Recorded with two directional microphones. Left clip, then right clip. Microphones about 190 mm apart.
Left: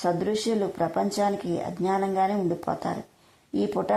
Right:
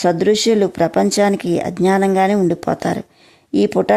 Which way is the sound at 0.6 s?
45° right (ahead or behind).